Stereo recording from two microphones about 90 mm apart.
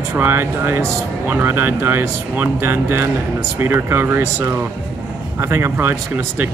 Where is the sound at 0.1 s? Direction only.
25° right (ahead or behind).